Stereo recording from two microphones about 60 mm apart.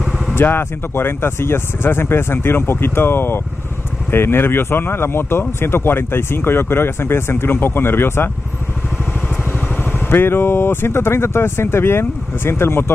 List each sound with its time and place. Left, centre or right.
0.3 s speech: left
9.9 s speech: left